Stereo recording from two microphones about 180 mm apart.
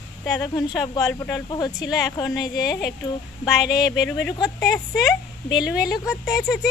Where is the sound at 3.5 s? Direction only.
5° right (ahead or behind).